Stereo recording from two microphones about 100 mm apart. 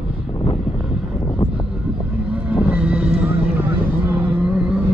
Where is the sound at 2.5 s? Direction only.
10° right (ahead or behind).